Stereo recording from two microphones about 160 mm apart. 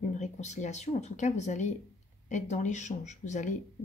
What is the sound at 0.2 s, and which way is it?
Speech, 45° left (ahead or behind).